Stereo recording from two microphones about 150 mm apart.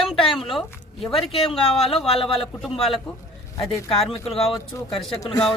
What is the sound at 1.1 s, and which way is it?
Speech, 35° left (ahead or behind).